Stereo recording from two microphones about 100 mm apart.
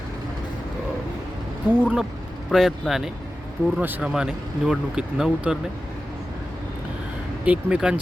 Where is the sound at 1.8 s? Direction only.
15° right (ahead or behind).